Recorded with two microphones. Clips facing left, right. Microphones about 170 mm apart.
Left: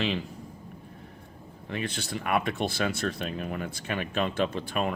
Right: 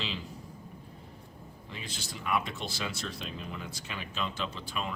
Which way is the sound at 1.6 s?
60° left (ahead or behind).